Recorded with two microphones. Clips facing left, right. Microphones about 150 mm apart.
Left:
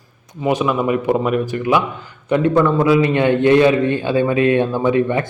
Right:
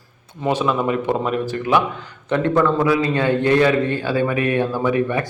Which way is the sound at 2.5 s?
20° left (ahead or behind).